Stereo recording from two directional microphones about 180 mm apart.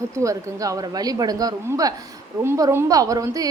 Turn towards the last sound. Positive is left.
turn(degrees=-20)  # may be behind; listen again after turning